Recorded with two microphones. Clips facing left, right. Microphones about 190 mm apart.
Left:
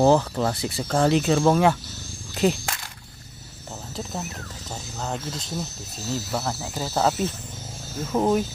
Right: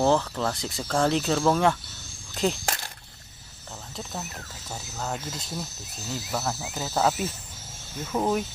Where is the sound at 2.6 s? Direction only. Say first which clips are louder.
Right 2 dB; 40° right (ahead or behind).